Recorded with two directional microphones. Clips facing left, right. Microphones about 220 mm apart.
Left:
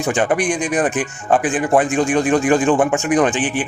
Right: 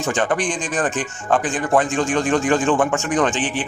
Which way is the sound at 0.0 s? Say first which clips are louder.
Left 3 dB; 15° left (ahead or behind).